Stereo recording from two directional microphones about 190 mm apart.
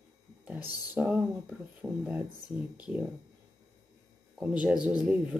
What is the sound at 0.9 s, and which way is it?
Speech, 5° right (ahead or behind).